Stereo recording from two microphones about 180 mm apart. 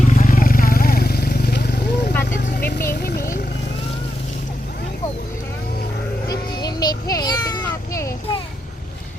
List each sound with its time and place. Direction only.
0.0 s vehicle: 45° left (ahead or behind); by 2.1 s 65° left (ahead or behind)
2.6 s vehicle: 55° left (ahead or behind)
6.2 s a sound: 20° left (ahead or behind)